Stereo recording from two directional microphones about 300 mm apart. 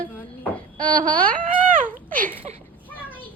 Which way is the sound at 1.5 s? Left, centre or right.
Right.